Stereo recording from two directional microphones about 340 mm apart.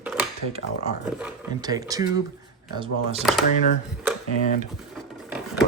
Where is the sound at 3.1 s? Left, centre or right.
Centre.